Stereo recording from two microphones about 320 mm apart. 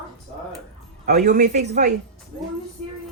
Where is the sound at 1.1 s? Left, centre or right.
Right.